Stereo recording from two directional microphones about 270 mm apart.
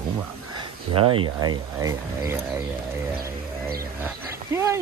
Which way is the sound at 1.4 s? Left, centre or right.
Centre.